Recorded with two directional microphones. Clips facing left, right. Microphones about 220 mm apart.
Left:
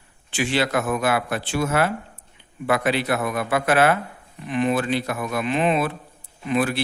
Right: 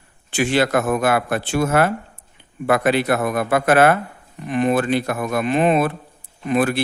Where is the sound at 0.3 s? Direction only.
50° right (ahead or behind).